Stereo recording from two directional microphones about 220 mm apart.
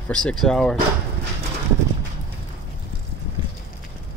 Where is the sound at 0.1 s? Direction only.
5° left (ahead or behind).